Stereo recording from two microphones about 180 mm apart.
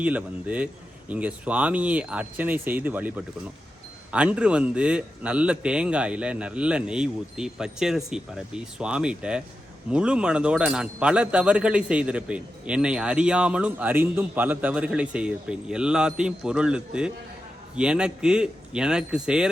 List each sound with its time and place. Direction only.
0.0 s speech: 10° right (ahead or behind)